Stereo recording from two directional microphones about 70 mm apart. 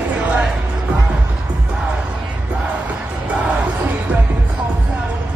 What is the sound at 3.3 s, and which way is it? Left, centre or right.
Music, centre.